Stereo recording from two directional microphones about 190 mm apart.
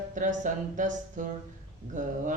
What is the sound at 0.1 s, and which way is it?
Speech, 40° right (ahead or behind).